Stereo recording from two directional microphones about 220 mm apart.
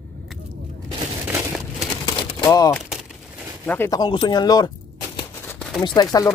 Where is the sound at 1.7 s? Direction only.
15° left (ahead or behind).